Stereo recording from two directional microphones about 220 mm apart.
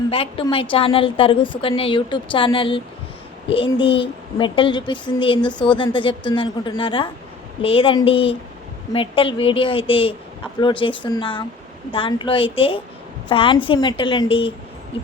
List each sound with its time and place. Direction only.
0.1 s a child's voice: 25° left (ahead or behind)